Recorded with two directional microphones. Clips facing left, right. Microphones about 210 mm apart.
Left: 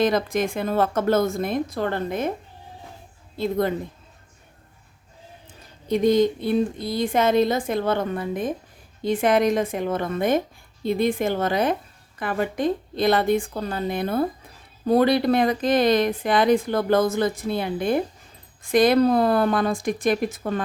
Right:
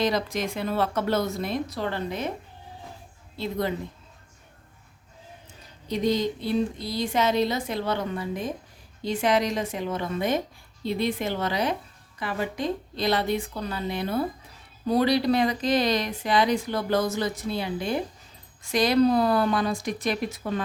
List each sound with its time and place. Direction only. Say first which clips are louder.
0.0 s speech: left 5 dB; 50° left (ahead or behind)
3.3 s speech: left 5 dB; 50° left (ahead or behind)
5.9 s speech: left 6 dB; 50° left (ahead or behind)